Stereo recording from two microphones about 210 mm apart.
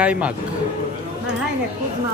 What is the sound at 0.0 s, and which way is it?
Speech, 5° right (ahead or behind).